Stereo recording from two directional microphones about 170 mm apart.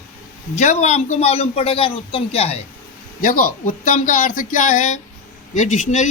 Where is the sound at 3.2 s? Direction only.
50° left (ahead or behind).